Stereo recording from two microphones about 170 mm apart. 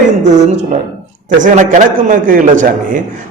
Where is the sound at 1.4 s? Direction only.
50° right (ahead or behind).